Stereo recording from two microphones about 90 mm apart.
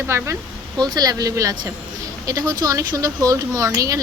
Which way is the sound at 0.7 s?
50° right (ahead or behind).